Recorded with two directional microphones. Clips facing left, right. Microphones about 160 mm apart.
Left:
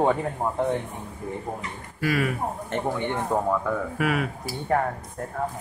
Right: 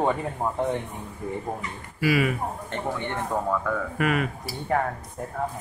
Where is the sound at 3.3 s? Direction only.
15° left (ahead or behind).